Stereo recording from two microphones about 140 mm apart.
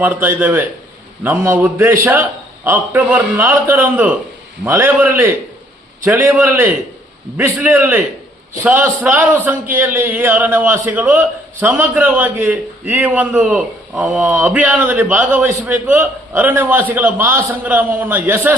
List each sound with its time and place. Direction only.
0.0 s a man's voice: 15° right (ahead or behind)